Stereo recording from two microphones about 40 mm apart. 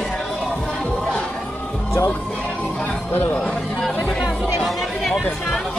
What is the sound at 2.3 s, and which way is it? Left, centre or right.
Music, left.